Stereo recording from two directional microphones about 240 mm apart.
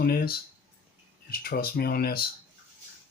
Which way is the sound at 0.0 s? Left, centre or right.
Left.